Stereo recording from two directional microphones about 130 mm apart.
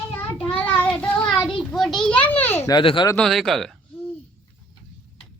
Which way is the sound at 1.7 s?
Centre (ahead or behind).